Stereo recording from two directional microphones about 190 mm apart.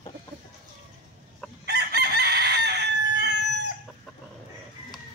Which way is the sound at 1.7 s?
60° right (ahead or behind).